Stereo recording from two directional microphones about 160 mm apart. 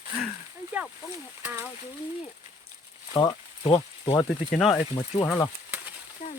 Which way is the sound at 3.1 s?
30° left (ahead or behind).